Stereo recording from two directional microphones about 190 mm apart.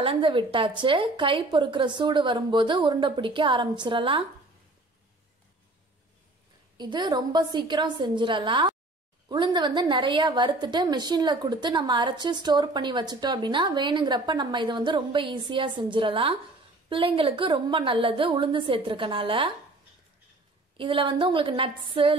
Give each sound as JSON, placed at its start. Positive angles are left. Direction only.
{"t": 0.0, "sound": "a woman's voice", "side_deg": -25}
{"t": 6.8, "sound": "a woman's voice", "side_deg": -25}
{"t": 20.7, "sound": "a woman's voice", "side_deg": -25}